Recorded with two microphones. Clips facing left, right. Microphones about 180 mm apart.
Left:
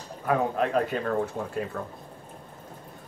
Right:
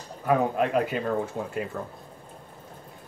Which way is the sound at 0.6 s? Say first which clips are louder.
Right 1 dB; 5° right (ahead or behind).